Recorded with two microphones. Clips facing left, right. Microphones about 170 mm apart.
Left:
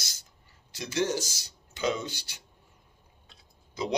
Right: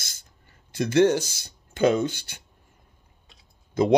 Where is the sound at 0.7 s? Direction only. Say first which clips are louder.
Right 10 dB; 55° right (ahead or behind).